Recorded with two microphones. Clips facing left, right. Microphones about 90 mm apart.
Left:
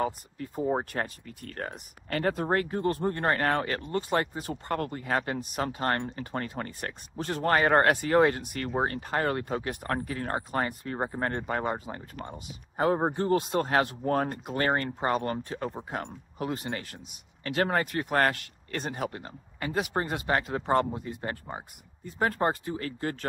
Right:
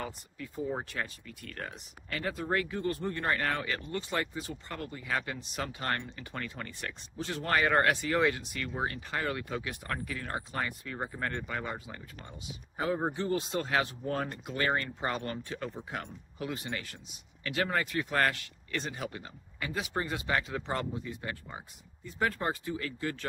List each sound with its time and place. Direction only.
0.0 s speech: 40° left (ahead or behind)